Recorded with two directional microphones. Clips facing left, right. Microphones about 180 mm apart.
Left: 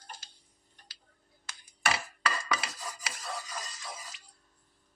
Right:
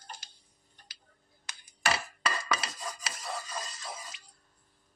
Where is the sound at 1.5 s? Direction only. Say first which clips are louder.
Even; 15° right (ahead or behind).